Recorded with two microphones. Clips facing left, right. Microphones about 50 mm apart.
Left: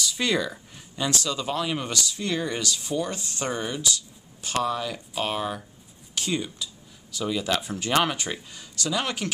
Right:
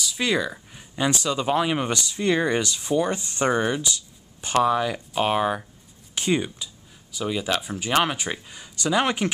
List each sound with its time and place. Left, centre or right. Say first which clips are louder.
0.0 s speech: right 1 dB; centre
0.9 s speech: right 4 dB; right
7.1 s speech: right 1 dB; centre